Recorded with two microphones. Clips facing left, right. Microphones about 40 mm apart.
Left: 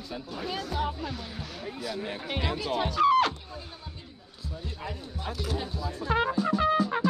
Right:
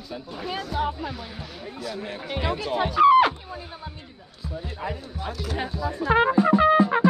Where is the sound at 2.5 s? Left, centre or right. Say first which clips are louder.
Right 5 dB; centre.